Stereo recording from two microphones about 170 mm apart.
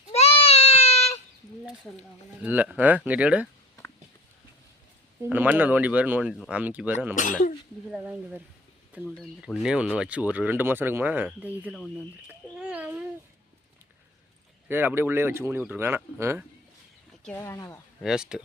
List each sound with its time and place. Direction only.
0.1 s a sound: 35° left (ahead or behind)
1.9 s speech: 10° left (ahead or behind)
2.4 s speech: 10° right (ahead or behind)
5.2 s speech: 10° right (ahead or behind)
9.0 s speech: centre (ahead or behind)
12.3 s a sound: 10° right (ahead or behind)
14.7 s speech: 15° right (ahead or behind)
17.4 s speech: 15° left (ahead or behind)
18.0 s speech: 5° right (ahead or behind)